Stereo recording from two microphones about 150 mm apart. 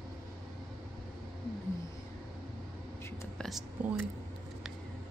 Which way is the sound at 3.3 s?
Centre (ahead or behind).